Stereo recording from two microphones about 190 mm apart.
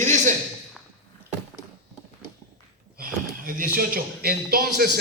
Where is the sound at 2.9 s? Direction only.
50° right (ahead or behind).